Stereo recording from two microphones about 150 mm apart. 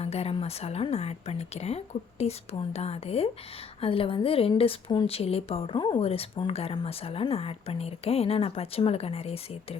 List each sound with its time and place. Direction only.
0.0 s a woman's voice: 45° left (ahead or behind)